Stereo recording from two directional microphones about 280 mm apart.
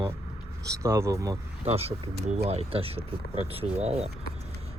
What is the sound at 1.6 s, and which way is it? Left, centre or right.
Speech, right.